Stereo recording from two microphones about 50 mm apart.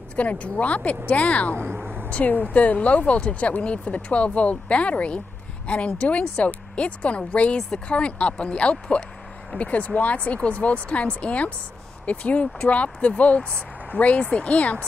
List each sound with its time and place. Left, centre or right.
0.1 s speech: left